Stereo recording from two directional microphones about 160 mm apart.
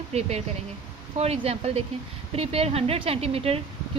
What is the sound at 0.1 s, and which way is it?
Speech, 40° right (ahead or behind).